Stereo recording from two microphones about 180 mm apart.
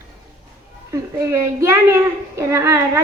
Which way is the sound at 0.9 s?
15° right (ahead or behind).